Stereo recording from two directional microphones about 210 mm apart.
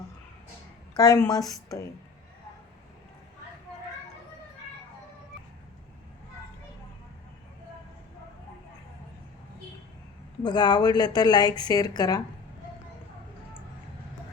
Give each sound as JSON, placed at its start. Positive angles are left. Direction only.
{"t": 0.9, "sound": "a woman's voice", "side_deg": 15}
{"t": 10.4, "sound": "speech", "side_deg": 20}